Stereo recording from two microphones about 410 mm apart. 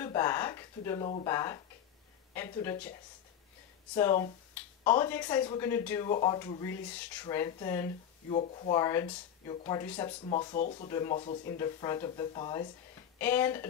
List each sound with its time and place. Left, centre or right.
0.0 s a sound: centre
2.3 s speech: centre
3.9 s speech: centre